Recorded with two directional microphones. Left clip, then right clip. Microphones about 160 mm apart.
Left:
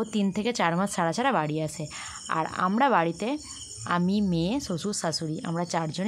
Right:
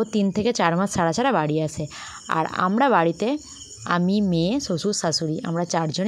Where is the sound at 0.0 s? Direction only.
25° right (ahead or behind).